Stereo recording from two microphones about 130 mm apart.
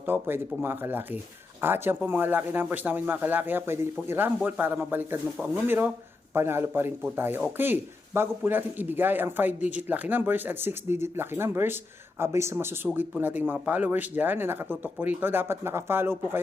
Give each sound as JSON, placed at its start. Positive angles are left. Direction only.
{"t": 0.0, "sound": "speech", "side_deg": -15}